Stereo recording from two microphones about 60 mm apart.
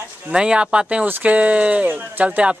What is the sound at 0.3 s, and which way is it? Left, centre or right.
Speech, centre.